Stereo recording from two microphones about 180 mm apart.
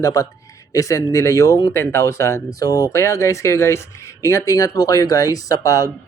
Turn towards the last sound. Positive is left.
turn(degrees=20)  # may be behind; listen again after turning